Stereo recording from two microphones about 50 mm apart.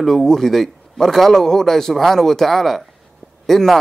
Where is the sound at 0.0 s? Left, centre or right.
Centre.